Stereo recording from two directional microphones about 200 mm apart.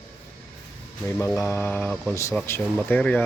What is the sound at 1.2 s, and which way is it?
A man's voice, 15° left (ahead or behind).